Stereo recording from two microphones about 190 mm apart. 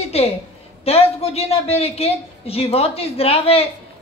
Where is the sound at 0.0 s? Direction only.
30° left (ahead or behind).